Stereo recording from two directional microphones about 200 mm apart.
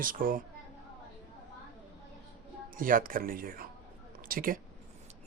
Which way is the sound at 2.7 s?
45° right (ahead or behind).